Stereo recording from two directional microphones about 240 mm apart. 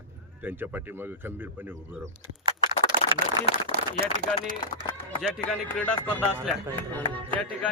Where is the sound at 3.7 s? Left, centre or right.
Right.